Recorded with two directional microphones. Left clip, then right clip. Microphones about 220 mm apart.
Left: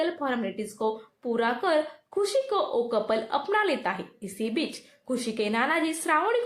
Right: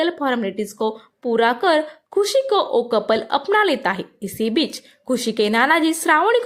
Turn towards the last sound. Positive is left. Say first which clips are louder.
# right 9 dB
turn(degrees=-40)  # may be behind; listen again after turning